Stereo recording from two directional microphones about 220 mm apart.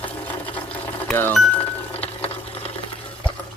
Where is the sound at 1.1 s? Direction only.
10° left (ahead or behind).